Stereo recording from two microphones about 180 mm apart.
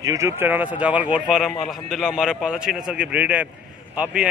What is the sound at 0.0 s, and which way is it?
A man's voice, 15° right (ahead or behind).